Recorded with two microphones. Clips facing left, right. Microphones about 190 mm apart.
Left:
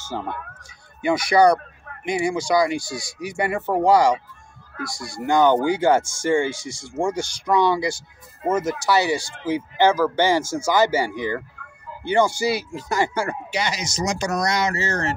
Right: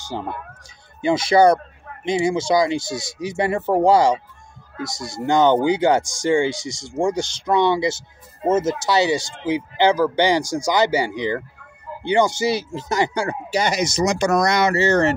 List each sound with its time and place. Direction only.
0.1 s speech: 15° right (ahead or behind)
13.5 s speech: 45° right (ahead or behind)
14.0 s speech: 60° right (ahead or behind)